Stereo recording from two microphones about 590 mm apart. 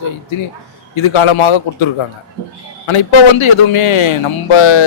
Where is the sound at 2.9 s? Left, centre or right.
Left.